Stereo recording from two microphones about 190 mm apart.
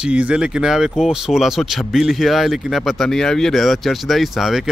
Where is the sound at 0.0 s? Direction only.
5° right (ahead or behind).